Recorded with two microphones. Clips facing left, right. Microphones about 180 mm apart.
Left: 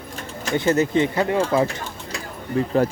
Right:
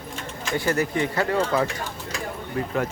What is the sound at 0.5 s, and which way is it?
Speech, 20° left (ahead or behind).